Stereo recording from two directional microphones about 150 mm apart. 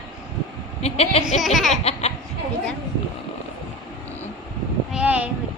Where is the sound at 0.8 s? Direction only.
40° left (ahead or behind).